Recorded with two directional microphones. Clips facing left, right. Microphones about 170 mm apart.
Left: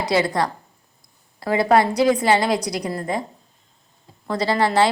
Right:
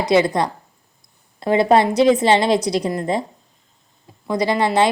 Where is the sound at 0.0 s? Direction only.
20° right (ahead or behind).